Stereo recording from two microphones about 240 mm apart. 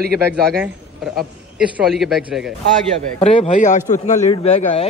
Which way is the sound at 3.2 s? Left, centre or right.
Left.